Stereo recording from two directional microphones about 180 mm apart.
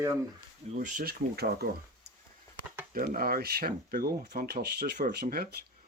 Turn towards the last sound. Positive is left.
turn(degrees=-55)  # may be behind; listen again after turning